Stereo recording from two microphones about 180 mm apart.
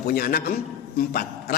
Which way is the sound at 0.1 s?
55° left (ahead or behind).